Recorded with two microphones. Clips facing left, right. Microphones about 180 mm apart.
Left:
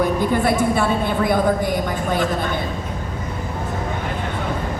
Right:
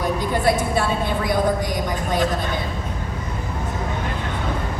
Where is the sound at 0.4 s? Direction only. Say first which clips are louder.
Left 2 dB; 55° left (ahead or behind).